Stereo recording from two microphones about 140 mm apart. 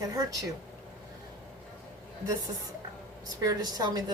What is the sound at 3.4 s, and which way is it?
Speech, 25° right (ahead or behind).